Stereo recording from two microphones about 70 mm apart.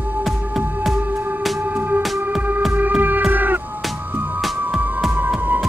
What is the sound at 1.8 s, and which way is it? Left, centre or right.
Music, right.